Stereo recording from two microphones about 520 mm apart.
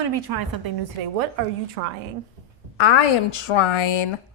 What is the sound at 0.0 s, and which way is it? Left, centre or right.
Speech, right.